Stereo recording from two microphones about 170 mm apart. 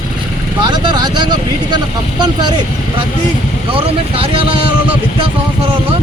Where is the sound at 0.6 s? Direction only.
25° right (ahead or behind).